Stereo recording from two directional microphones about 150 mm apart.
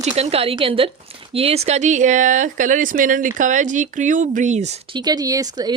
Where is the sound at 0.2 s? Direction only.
40° right (ahead or behind).